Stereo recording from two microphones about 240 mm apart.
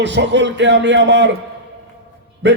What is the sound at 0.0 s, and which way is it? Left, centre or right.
A man's voice, right.